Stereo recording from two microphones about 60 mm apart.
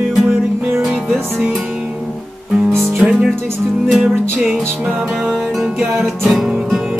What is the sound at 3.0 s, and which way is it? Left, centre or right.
Music, centre.